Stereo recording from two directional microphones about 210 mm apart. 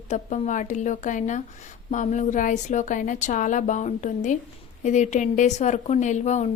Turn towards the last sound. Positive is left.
turn(degrees=35)  # may be behind; listen again after turning